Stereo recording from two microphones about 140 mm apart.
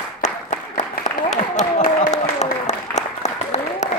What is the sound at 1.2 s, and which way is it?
Applause, 60° left (ahead or behind).